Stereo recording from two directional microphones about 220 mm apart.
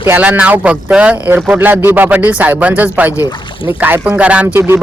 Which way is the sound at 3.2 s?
20° left (ahead or behind).